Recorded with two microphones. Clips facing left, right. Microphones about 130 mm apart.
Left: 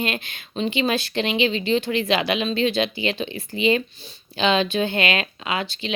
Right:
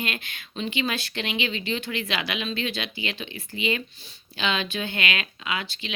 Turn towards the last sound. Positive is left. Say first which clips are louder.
# left 5 dB
turn(degrees=30)  # may be behind; listen again after turning